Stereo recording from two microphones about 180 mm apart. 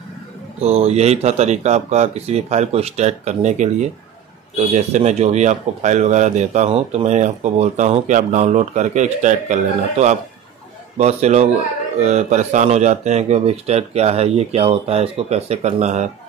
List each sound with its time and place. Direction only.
0.6 s a man's voice: 35° right (ahead or behind)